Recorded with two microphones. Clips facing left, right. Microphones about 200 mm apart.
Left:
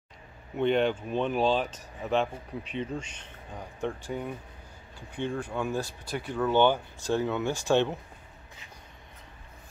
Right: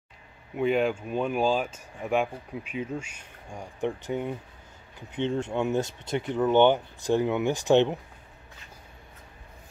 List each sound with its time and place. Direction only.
0.6 s speech: 5° right (ahead or behind)